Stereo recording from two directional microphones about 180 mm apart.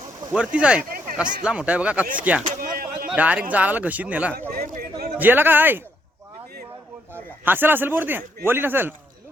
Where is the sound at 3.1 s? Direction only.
10° right (ahead or behind).